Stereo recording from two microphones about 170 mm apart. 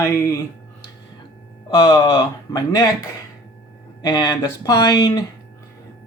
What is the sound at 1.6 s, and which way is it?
Speech, 25° left (ahead or behind).